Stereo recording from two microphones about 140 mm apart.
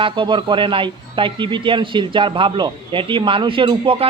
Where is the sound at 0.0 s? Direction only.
35° right (ahead or behind).